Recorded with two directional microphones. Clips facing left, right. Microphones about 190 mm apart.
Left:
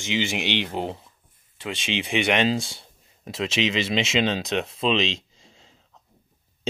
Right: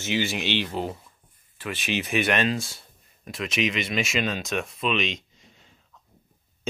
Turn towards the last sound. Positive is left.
turn(degrees=30)  # may be behind; listen again after turning